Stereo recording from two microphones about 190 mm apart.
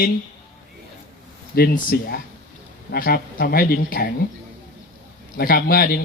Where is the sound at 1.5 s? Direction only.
50° left (ahead or behind).